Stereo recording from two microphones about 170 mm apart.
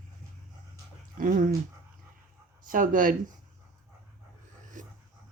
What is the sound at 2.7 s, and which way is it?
Speech, 55° right (ahead or behind).